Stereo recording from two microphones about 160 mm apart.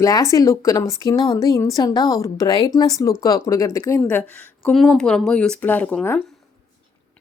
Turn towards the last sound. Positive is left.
turn(degrees=10)  # may be behind; listen again after turning